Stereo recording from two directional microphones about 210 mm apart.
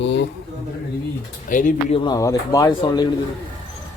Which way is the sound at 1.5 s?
40° left (ahead or behind).